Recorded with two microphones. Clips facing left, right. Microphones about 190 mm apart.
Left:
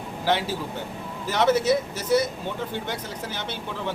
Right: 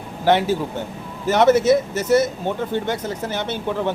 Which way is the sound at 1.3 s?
50° right (ahead or behind).